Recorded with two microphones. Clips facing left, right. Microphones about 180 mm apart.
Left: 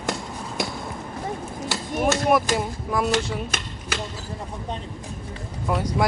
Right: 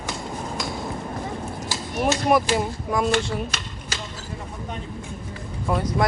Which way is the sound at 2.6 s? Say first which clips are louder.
Right 1 dB; centre (ahead or behind).